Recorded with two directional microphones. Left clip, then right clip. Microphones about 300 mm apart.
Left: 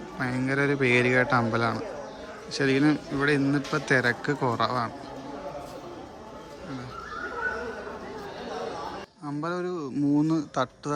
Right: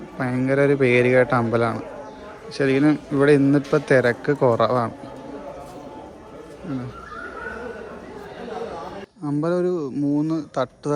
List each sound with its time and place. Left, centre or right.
0.2 s a man's voice: centre
9.2 s speech: centre